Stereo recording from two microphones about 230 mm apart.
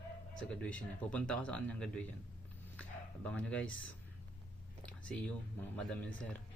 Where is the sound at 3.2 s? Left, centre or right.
Centre.